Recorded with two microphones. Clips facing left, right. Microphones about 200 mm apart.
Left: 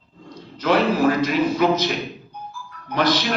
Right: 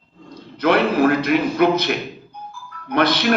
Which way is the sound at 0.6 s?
60° right (ahead or behind).